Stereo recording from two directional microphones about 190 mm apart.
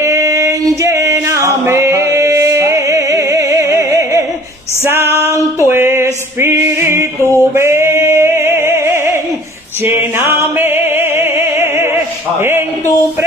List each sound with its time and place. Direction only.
0.0 s singing: 15° right (ahead or behind)
4.8 s female singing: 15° right (ahead or behind)
5.7 s music: 10° right (ahead or behind)
7.2 s a sound: 10° left (ahead or behind)
7.5 s music: 15° right (ahead or behind)